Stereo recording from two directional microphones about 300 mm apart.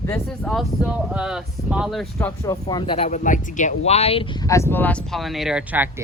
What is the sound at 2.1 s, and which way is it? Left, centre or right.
A woman's voice, centre.